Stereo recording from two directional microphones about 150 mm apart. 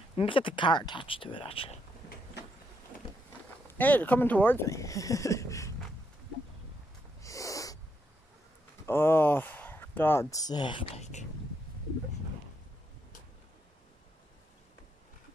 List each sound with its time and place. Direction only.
0.1 s speech: 35° left (ahead or behind)
2.4 s a sound: 90° left
3.6 s speech: 10° left (ahead or behind)
7.2 s owl: 20° left (ahead or behind)
8.8 s speech: 15° left (ahead or behind)
11.0 s speech: 50° left (ahead or behind)